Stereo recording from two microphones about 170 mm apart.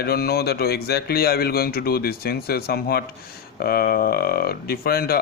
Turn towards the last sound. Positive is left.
turn(degrees=65)  # may be behind; listen again after turning